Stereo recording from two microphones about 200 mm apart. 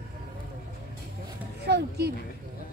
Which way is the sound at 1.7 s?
55° right (ahead or behind).